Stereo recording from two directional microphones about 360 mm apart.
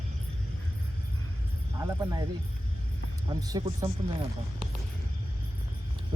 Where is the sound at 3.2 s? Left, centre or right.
Centre.